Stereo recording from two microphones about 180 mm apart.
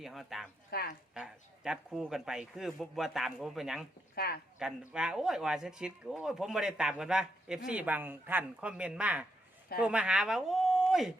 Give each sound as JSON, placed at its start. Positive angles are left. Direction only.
{"t": 0.0, "sound": "speech", "side_deg": 0}
{"t": 0.7, "sound": "a woman's voice", "side_deg": 60}
{"t": 1.1, "sound": "speech", "side_deg": -5}
{"t": 4.1, "sound": "speech", "side_deg": 60}
{"t": 4.9, "sound": "speech", "side_deg": -5}